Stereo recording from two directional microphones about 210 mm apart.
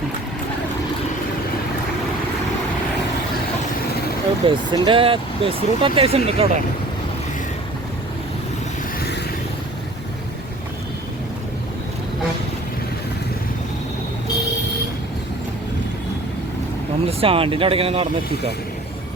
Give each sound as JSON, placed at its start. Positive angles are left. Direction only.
{"t": 4.4, "sound": "speech", "side_deg": -25}
{"t": 17.1, "sound": "speech", "side_deg": -25}